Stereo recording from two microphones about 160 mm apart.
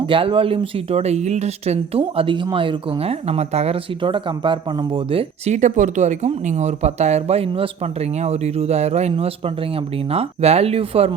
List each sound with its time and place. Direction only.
0.0 s speech: 35° right (ahead or behind)
5.5 s speech: 50° right (ahead or behind)